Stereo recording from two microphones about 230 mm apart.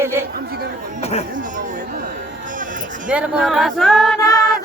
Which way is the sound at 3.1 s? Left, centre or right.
Centre.